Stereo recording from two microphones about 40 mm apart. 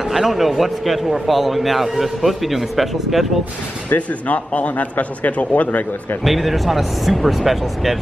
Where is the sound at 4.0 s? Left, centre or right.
Left.